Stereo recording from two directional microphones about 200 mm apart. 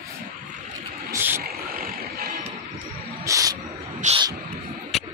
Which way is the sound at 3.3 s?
15° right (ahead or behind).